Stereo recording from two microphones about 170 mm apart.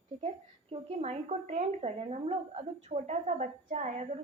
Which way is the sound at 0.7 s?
40° right (ahead or behind).